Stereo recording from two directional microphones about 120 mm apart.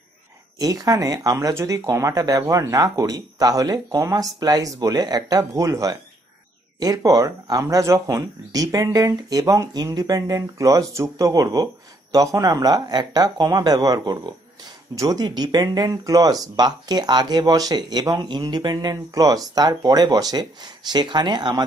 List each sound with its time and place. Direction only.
0.6 s speech: 30° right (ahead or behind)